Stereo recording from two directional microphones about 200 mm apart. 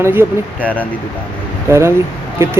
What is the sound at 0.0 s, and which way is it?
Speech, 10° right (ahead or behind).